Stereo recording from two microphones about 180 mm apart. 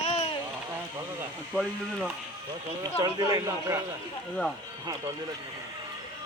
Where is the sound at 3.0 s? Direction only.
20° right (ahead or behind).